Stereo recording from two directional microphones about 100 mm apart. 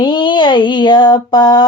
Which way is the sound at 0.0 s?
50° left (ahead or behind).